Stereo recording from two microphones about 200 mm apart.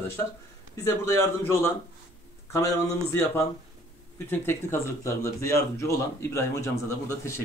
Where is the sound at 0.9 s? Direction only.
10° left (ahead or behind).